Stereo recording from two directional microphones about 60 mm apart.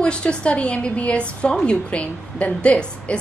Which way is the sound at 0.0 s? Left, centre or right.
Centre.